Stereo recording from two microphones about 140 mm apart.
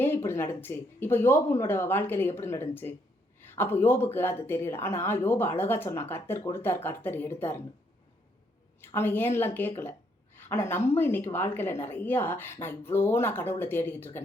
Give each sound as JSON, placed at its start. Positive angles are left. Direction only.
{"t": 0.0, "sound": "speech", "side_deg": 15}
{"t": 8.8, "sound": "speech", "side_deg": 15}